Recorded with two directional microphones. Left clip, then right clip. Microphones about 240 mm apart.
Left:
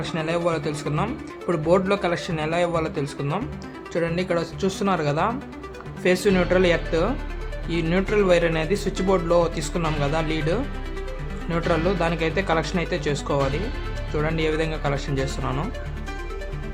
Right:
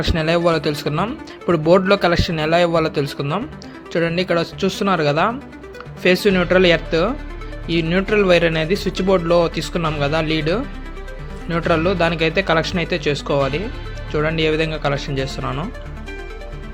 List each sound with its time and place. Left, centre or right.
0.0 s speech: right